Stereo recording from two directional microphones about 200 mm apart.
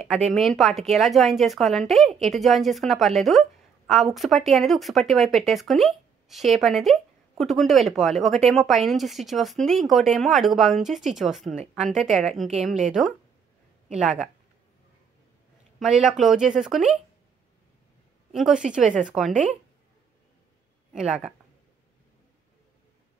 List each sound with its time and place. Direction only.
0.3 s a woman's voice: centre (ahead or behind)
15.8 s a woman's voice: 5° right (ahead or behind)
18.3 s a woman's voice: 5° right (ahead or behind)
20.9 s a woman's voice: 5° right (ahead or behind)